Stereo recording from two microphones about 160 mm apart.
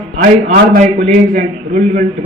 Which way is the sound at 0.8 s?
50° right (ahead or behind).